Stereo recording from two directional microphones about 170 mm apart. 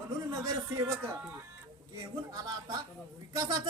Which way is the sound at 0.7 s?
15° right (ahead or behind).